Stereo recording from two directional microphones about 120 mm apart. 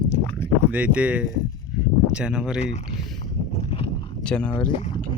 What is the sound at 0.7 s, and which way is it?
Speech, 10° right (ahead or behind).